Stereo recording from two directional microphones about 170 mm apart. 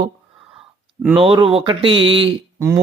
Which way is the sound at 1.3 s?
30° right (ahead or behind).